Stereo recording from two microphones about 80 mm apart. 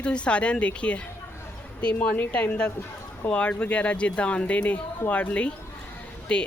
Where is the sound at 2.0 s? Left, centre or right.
Centre.